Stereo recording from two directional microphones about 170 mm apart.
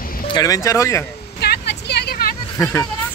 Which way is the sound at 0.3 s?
20° left (ahead or behind).